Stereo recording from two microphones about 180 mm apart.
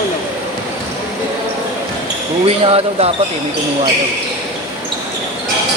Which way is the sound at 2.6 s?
35° right (ahead or behind).